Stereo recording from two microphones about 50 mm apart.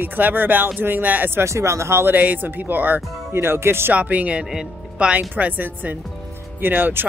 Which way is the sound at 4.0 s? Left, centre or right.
Right.